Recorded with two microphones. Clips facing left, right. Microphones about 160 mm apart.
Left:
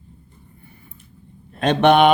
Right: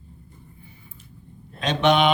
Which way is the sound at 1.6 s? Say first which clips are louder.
Left 5 dB; 55° left (ahead or behind).